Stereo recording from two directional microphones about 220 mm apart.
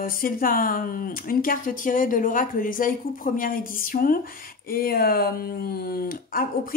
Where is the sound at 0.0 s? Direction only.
40° left (ahead or behind).